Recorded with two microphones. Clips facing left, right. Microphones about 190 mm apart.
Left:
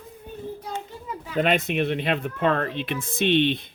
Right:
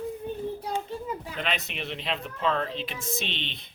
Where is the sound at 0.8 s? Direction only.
35° right (ahead or behind).